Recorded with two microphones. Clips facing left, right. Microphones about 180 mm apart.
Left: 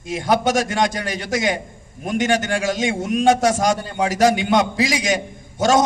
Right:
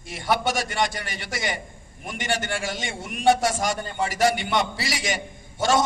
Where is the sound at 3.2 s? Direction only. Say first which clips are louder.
Left 4 dB; 45° left (ahead or behind).